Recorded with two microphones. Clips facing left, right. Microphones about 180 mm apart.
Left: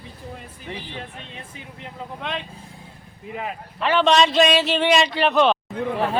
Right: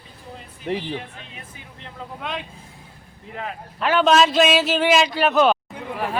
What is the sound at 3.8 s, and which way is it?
Speech, centre (ahead or behind).